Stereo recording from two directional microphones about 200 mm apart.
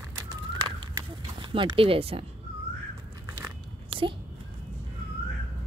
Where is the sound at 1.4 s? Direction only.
25° right (ahead or behind).